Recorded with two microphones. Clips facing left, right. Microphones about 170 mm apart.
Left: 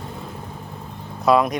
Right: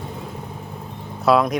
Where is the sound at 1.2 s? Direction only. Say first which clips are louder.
Even; centre (ahead or behind).